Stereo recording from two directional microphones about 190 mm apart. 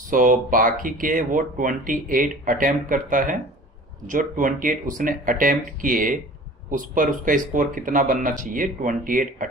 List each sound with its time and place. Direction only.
0.1 s speech: 45° right (ahead or behind)